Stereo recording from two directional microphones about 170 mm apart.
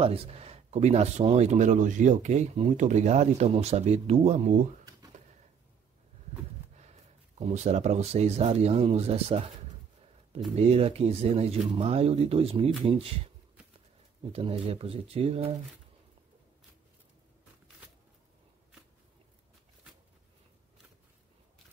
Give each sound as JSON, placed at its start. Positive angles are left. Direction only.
{"t": 0.0, "sound": "speech", "side_deg": -35}
{"t": 6.8, "sound": "speech", "side_deg": -40}
{"t": 10.5, "sound": "speech", "side_deg": -35}
{"t": 14.7, "sound": "speech", "side_deg": -35}